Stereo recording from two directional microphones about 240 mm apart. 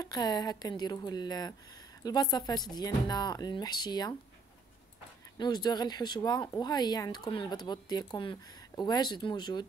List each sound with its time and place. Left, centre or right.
0.0 s speech: centre
5.4 s speech: centre